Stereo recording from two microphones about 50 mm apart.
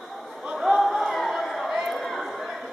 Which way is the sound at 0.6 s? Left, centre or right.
Centre.